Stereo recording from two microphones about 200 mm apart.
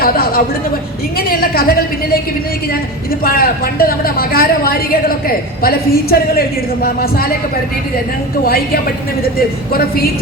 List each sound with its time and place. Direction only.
0.0 s a sound: 45° left (ahead or behind)
1.3 s a woman's voice: 45° left (ahead or behind)
3.2 s a woman's voice: 50° left (ahead or behind)
8.4 s a woman's voice: 50° left (ahead or behind)